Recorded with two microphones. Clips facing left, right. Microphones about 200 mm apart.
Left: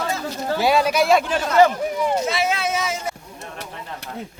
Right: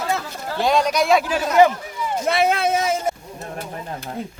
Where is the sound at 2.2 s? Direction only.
55° right (ahead or behind).